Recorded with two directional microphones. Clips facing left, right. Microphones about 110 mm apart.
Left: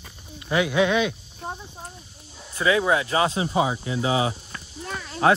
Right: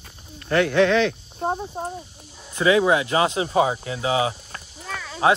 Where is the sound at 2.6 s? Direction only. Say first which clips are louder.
Right 3 dB; 25° right (ahead or behind).